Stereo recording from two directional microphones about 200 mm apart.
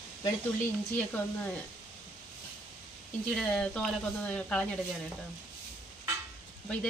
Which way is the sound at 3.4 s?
5° left (ahead or behind).